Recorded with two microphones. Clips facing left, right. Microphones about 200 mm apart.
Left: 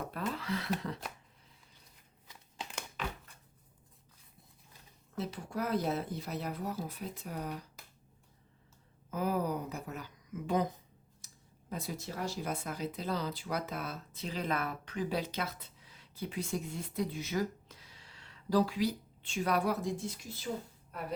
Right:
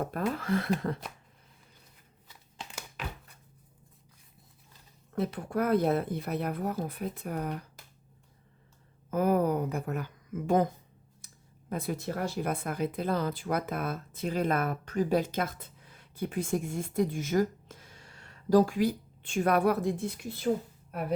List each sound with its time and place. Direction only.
0.0 s speech: 50° right (ahead or behind)
5.1 s speech: 55° right (ahead or behind)
9.0 s speech: 55° right (ahead or behind)
11.2 s a sound: 55° right (ahead or behind)
11.7 s speech: 55° right (ahead or behind)